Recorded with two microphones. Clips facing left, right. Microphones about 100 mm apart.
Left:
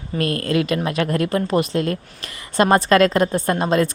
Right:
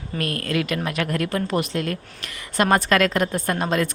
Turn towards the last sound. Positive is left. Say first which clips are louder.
# left 4 dB
turn(degrees=30)  # may be behind; listen again after turning